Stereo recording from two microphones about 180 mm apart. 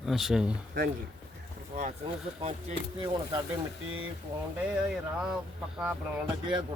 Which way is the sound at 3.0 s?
25° right (ahead or behind).